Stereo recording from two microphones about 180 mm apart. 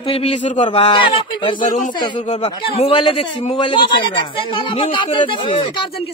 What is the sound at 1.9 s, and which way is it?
A man's voice, 25° left (ahead or behind).